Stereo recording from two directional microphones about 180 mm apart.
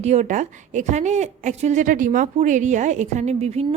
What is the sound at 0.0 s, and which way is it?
A woman's voice, 40° right (ahead or behind).